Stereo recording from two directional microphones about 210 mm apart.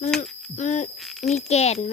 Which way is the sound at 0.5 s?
35° left (ahead or behind).